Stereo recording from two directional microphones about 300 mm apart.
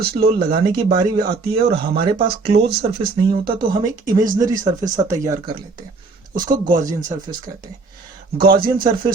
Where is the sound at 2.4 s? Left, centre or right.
Right.